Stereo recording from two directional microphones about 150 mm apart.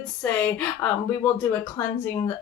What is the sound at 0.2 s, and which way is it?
Speech, 10° left (ahead or behind).